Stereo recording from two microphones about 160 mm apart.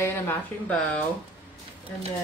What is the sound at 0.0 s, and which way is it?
A woman's voice, 10° left (ahead or behind).